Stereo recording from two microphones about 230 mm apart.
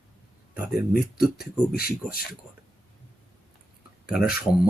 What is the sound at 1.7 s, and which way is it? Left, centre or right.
Speech, left.